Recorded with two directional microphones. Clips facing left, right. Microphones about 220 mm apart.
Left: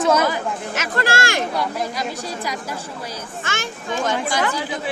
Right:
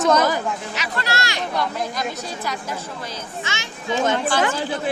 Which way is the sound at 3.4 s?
50° left (ahead or behind).